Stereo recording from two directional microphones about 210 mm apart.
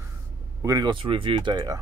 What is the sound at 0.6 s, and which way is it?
Speech, 15° right (ahead or behind).